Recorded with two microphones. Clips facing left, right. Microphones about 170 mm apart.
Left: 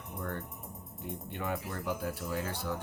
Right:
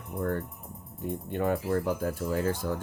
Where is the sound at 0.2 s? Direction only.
45° right (ahead or behind).